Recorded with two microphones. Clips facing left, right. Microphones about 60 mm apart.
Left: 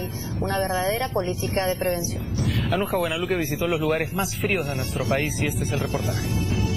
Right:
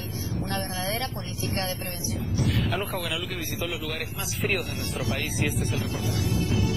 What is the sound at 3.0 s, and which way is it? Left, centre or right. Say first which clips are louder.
Speech: left 8 dB; left.